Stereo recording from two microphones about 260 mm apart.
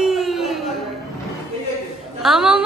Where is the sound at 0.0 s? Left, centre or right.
Centre.